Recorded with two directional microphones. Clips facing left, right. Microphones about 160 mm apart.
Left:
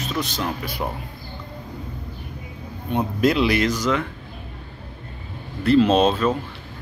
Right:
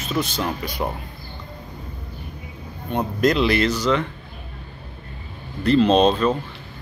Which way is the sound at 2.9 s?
5° left (ahead or behind).